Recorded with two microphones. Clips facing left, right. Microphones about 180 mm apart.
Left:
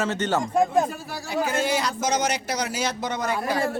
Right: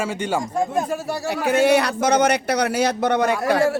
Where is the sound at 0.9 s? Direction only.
70° right (ahead or behind).